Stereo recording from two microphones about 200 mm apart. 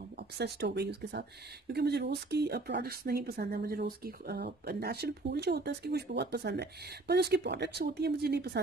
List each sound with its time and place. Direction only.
0.4 s speech: 55° right (ahead or behind)